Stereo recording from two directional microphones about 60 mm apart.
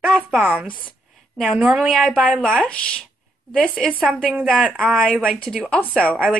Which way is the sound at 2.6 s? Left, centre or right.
Centre.